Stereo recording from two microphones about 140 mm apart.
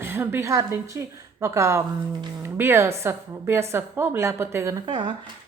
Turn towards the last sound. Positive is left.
turn(degrees=-35)  # may be behind; listen again after turning